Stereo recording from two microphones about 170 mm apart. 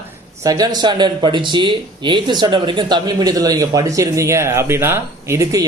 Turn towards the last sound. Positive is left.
turn(degrees=-15)  # may be behind; listen again after turning